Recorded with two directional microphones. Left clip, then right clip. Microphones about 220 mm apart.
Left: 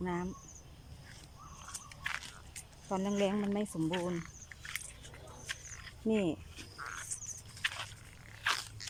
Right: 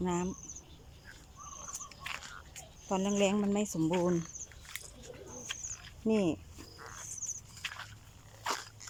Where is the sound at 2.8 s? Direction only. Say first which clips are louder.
Right 3 dB; 5° right (ahead or behind).